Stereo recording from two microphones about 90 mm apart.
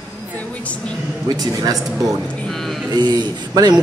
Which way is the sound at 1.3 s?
45° right (ahead or behind).